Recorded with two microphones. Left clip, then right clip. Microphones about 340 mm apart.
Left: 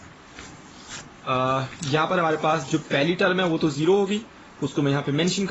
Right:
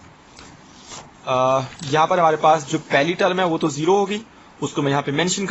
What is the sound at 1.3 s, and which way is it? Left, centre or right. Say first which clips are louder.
Speech: right 5 dB; centre.